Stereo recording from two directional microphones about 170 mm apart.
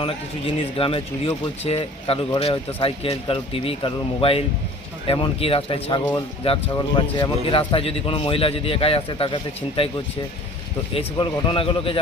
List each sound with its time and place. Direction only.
0.0 s speech: 30° left (ahead or behind)
10.9 s speech: 30° left (ahead or behind)